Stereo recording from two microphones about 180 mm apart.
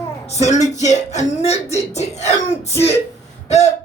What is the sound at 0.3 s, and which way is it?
Throat clearing, 40° left (ahead or behind).